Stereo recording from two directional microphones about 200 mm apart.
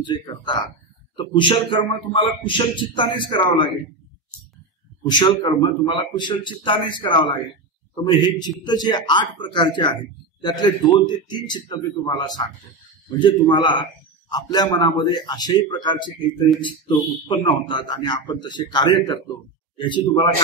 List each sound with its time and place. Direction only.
0.0 s a man's voice: 25° left (ahead or behind)
5.0 s a man's voice: 20° left (ahead or behind)